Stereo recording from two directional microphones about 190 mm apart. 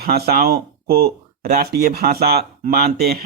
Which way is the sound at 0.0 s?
50° right (ahead or behind).